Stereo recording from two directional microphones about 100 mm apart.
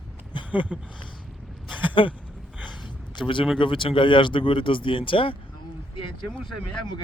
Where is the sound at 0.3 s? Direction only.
55° left (ahead or behind).